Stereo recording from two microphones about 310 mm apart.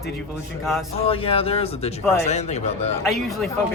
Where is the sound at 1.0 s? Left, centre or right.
Centre.